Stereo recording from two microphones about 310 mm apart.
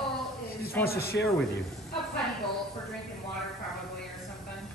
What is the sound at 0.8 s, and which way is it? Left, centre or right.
Speech, left.